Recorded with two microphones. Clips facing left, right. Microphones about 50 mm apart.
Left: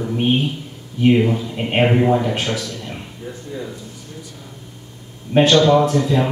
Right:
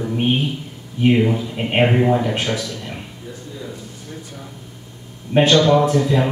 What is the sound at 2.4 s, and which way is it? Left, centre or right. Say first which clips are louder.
Speech: even; centre.